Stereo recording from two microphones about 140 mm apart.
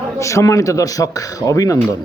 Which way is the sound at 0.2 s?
20° left (ahead or behind).